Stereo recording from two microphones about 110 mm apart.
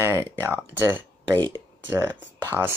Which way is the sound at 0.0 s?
25° right (ahead or behind).